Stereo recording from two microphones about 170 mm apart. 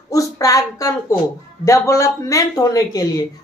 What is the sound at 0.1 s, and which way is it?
Speech, 20° left (ahead or behind).